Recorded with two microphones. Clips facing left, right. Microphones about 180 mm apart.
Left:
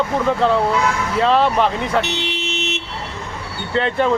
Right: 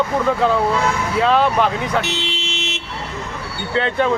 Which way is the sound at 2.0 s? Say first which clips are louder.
Left 1 dB; 60° left (ahead or behind).